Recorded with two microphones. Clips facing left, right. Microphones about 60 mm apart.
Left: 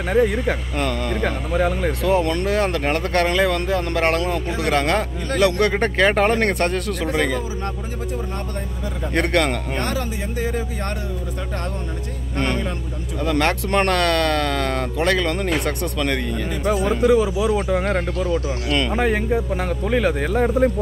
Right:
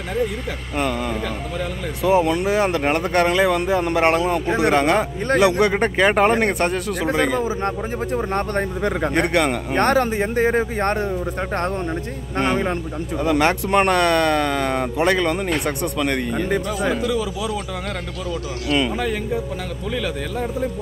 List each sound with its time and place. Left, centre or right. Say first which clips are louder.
0.1 s a man's voice: left 6 dB; left
0.7 s speech: right 1 dB; centre
1.2 s speech: left 5 dB; left
2.0 s speech: right 3 dB; centre
7.3 s speech: right 5 dB; right
8.5 s speech: right 8 dB; right
9.1 s speech: left 2 dB; centre
9.8 s speech: right 7 dB; right
12.4 s speech: right 3 dB; right
13.2 s speech: right 2 dB; centre
16.9 s a man's voice: left 6 dB; left